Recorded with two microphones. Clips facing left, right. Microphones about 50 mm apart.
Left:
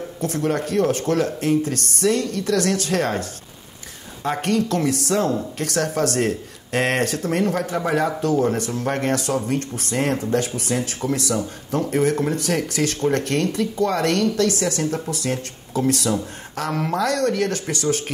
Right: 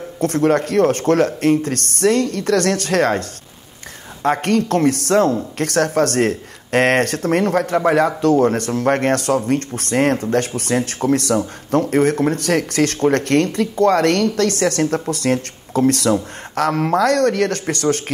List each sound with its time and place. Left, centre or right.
0.2 s speech: right